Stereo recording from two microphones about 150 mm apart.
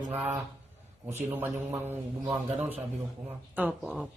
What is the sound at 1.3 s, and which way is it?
A man's voice, 15° right (ahead or behind).